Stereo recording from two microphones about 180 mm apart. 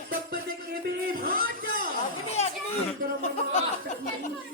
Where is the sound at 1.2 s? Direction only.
55° right (ahead or behind).